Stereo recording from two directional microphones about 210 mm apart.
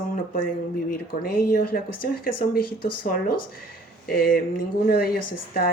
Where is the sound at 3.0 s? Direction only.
40° left (ahead or behind).